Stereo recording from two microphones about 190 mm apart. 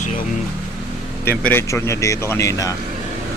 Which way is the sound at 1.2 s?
10° left (ahead or behind).